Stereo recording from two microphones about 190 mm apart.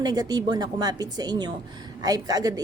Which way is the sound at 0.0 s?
20° right (ahead or behind).